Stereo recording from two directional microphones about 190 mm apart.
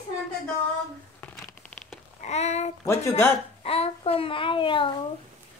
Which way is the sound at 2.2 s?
35° left (ahead or behind).